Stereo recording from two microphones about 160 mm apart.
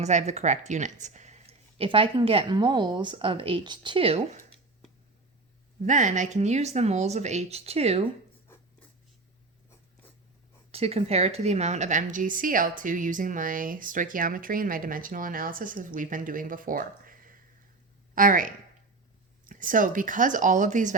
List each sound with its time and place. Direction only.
0.0 s speech: 45° right (ahead or behind)
5.8 s speech: 50° right (ahead or behind)
8.5 s writing: 15° left (ahead or behind)
10.7 s a woman's voice: 40° right (ahead or behind)